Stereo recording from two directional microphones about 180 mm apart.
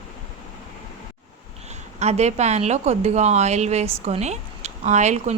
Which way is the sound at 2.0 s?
40° right (ahead or behind).